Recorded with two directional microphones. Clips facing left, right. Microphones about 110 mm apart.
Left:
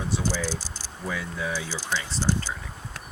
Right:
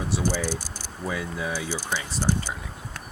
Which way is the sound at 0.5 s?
55° right (ahead or behind).